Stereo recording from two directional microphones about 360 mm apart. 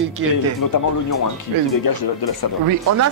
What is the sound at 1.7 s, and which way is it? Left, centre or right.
Speech, left.